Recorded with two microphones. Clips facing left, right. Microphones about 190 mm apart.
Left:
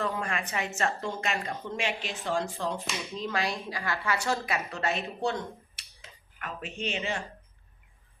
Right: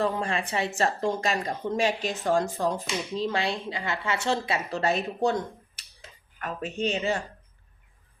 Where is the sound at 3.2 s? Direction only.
30° right (ahead or behind).